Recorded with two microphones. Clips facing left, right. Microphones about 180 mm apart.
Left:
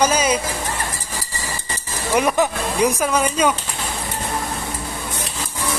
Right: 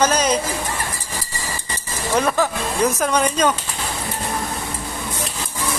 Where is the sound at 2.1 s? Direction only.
15° left (ahead or behind).